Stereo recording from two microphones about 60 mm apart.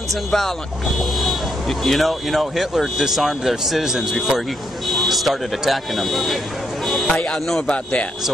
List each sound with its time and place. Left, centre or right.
0.1 s speech: centre
7.1 s speech: centre
7.7 s speech: centre